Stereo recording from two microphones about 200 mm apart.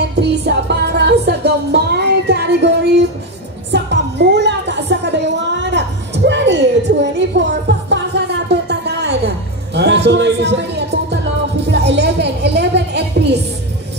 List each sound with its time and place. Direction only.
0.2 s music: 60° right (ahead or behind)
3.7 s music: 60° right (ahead or behind)